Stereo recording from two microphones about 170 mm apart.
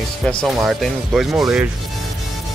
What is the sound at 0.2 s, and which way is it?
Speech, 5° left (ahead or behind).